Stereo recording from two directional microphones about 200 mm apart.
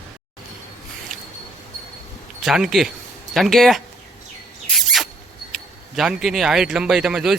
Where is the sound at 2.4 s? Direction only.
Centre (ahead or behind).